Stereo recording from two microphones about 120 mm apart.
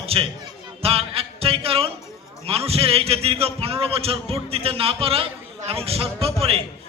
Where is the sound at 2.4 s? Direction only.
55° right (ahead or behind).